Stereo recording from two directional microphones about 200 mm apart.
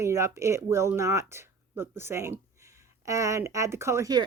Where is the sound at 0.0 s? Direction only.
15° right (ahead or behind).